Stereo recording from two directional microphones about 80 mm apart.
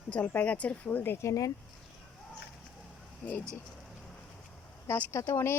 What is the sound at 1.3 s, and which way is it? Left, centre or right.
Speech, left.